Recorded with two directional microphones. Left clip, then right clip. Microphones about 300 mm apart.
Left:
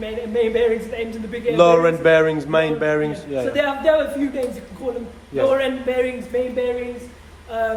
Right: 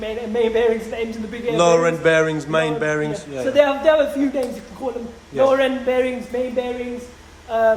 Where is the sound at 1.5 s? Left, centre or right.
Centre.